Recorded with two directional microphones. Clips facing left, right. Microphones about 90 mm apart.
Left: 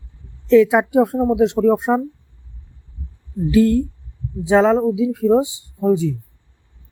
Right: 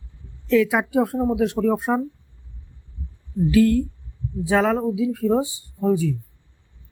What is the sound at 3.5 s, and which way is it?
Speech, 25° left (ahead or behind).